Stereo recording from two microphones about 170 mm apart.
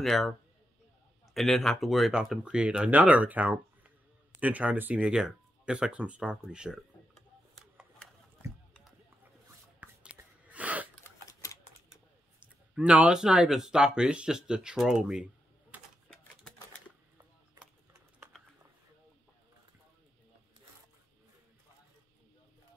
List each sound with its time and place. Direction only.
0.0 s speech: centre (ahead or behind)
1.3 s speech: centre (ahead or behind)
4.4 s a sound: 10° right (ahead or behind)
9.8 s a sound: 10° right (ahead or behind)
11.1 s typewriter: 20° left (ahead or behind)
12.7 s speech: 5° right (ahead or behind)